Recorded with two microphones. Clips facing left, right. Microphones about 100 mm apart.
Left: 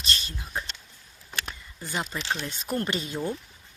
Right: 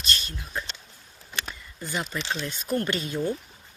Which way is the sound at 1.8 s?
25° left (ahead or behind).